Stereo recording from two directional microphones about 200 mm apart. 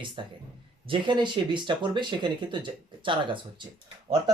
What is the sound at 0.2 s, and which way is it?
Speech, 25° right (ahead or behind).